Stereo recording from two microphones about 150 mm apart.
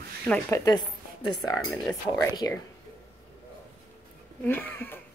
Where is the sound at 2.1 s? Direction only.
25° left (ahead or behind).